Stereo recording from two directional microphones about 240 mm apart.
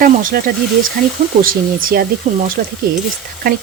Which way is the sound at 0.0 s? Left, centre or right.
Right.